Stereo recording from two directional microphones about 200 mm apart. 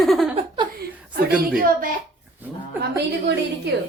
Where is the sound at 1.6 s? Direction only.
45° right (ahead or behind).